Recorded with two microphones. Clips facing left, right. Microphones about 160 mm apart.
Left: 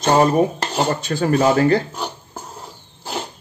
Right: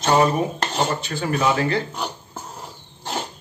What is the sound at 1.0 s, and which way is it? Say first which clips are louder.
Speech: left 5 dB; 40° left (ahead or behind).